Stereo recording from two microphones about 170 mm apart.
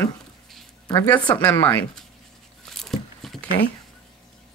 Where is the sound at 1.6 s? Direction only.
10° left (ahead or behind).